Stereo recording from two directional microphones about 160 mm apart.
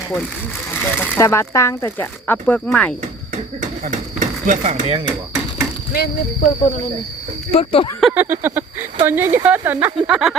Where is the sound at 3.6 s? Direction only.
50° right (ahead or behind).